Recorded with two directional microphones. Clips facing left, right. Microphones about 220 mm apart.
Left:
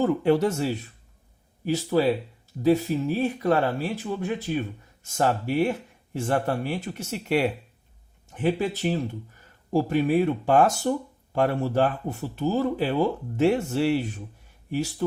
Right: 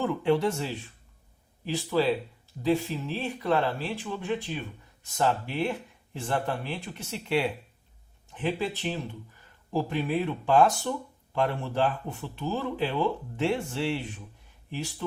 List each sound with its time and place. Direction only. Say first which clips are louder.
0.0 s speech: left 4 dB; 40° left (ahead or behind)